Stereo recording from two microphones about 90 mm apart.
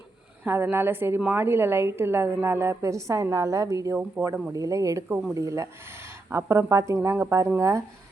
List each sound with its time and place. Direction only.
0.4 s a woman's voice: 25° right (ahead or behind)